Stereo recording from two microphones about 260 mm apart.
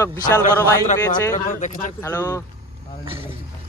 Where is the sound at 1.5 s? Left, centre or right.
Left.